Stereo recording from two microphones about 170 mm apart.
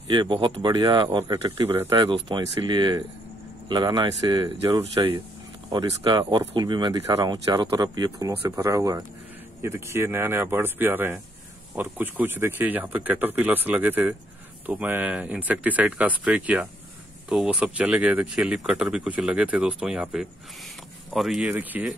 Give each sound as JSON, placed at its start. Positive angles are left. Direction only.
{"t": 0.1, "sound": "speech", "side_deg": -30}